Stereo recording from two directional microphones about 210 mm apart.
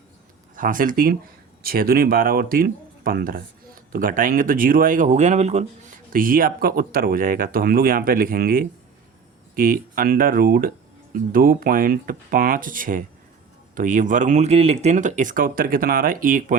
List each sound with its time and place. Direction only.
0.5 s speech: 40° right (ahead or behind)